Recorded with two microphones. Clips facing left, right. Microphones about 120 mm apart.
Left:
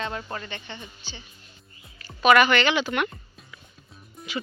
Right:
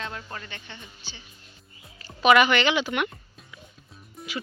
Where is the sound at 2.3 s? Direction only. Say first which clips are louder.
Left 1 dB; 15° right (ahead or behind).